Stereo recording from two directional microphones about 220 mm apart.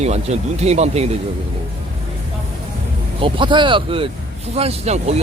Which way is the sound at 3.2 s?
20° right (ahead or behind).